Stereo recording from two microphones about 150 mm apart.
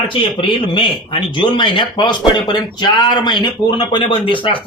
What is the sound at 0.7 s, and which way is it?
Speech, 35° left (ahead or behind).